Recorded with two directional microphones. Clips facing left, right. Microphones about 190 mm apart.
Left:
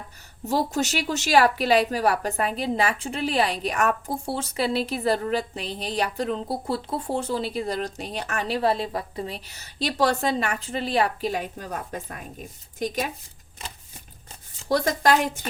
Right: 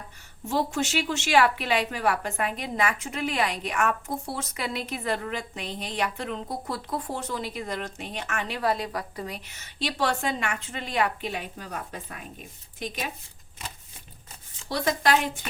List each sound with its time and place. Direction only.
0.4 s a woman's voice: 40° left (ahead or behind)
14.7 s a woman's voice: 45° left (ahead or behind)